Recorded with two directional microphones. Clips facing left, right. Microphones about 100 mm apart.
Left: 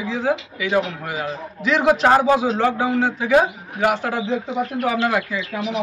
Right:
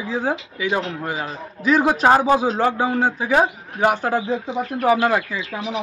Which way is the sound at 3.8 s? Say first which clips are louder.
Right 1 dB; 40° right (ahead or behind).